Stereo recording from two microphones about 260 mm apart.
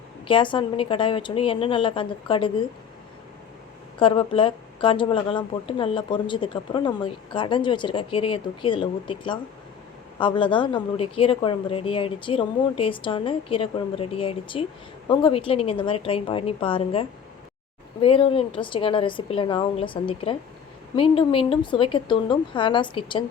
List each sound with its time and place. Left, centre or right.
0.3 s speech: centre
4.0 s speech: centre